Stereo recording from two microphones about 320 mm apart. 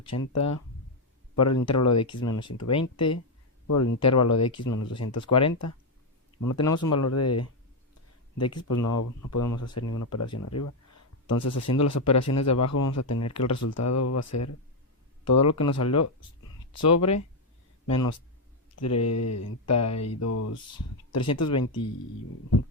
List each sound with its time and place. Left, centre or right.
0.1 s speech: left